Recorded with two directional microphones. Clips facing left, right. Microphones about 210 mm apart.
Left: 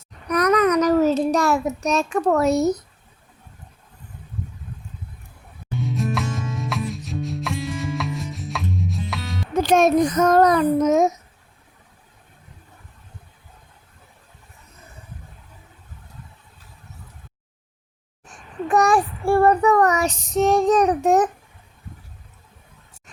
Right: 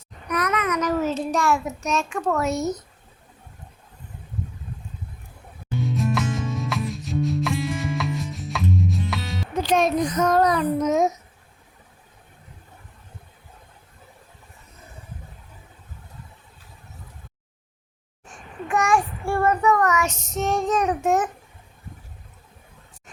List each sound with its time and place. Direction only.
0.3 s child singing: 40° left (ahead or behind)
5.7 s music: centre (ahead or behind)
9.6 s child singing: 45° left (ahead or behind)
18.7 s child singing: 35° left (ahead or behind)